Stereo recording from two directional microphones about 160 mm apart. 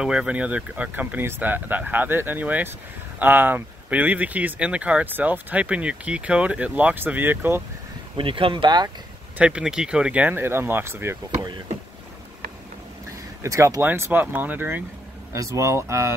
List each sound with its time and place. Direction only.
0.0 s speech: 5° right (ahead or behind)
8.2 s speech: 35° right (ahead or behind)
9.4 s speech: 5° right (ahead or behind)
13.4 s speech: 20° right (ahead or behind)